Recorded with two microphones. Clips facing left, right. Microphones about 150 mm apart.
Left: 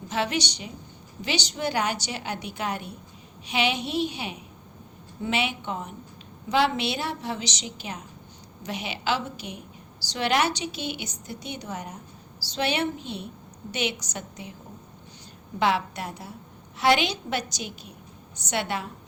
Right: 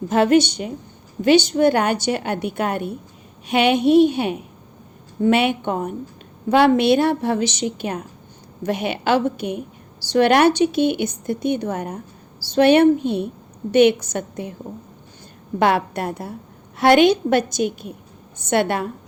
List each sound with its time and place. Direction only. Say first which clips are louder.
0.1 s a woman's voice: right 12 dB; 50° right (ahead or behind)
15.5 s a woman's voice: right 6 dB; 55° right (ahead or behind)